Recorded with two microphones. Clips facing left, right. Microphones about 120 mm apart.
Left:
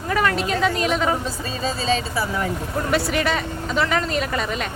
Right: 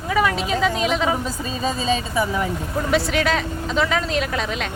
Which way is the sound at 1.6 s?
15° right (ahead or behind).